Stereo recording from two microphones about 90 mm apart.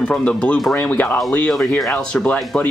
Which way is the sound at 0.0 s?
10° left (ahead or behind).